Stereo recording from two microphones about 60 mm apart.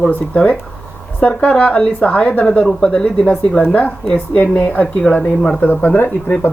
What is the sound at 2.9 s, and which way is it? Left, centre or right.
Speech, left.